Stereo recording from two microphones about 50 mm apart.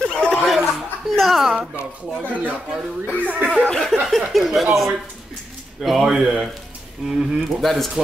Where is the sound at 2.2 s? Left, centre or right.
Right.